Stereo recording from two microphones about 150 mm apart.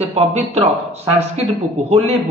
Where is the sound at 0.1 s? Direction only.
45° right (ahead or behind).